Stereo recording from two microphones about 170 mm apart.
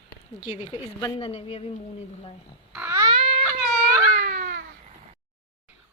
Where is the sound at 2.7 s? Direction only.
10° right (ahead or behind).